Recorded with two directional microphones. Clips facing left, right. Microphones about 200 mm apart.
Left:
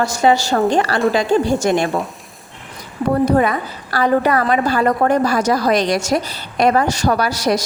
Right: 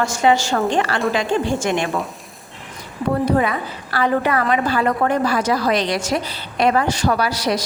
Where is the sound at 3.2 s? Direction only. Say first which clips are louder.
Left 3 dB; 45° left (ahead or behind).